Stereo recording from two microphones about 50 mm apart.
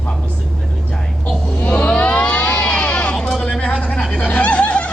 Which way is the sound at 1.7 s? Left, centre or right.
Left.